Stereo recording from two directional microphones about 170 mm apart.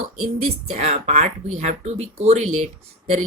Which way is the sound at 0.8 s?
40° right (ahead or behind).